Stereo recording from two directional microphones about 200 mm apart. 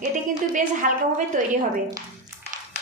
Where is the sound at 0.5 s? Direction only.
40° right (ahead or behind).